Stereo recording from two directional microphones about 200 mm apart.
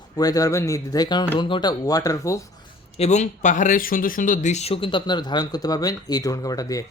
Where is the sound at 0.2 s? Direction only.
20° left (ahead or behind).